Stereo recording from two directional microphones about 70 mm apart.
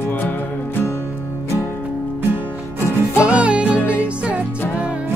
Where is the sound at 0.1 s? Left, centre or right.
Left.